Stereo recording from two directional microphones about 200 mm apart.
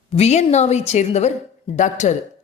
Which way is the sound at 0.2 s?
30° left (ahead or behind).